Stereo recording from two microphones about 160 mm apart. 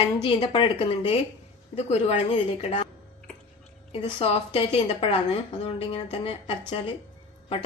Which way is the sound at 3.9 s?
35° left (ahead or behind).